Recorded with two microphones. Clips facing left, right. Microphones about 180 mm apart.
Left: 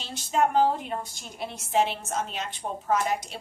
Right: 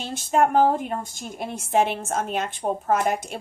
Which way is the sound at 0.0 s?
50° right (ahead or behind).